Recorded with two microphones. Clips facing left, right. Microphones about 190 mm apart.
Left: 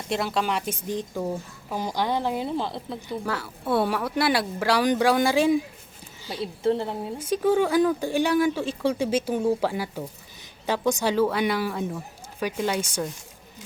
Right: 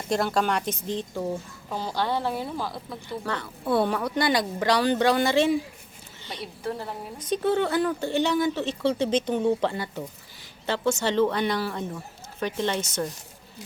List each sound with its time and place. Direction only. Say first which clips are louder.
0.1 s a woman's voice: right 2 dB; 5° left (ahead or behind); by 3.2 s 25° left (ahead or behind)
3.2 s speech: right 1 dB; 5° left (ahead or behind)
6.4 s a woman's voice: left 8 dB; 25° left (ahead or behind)
7.2 s speech: left 2 dB; 10° left (ahead or behind)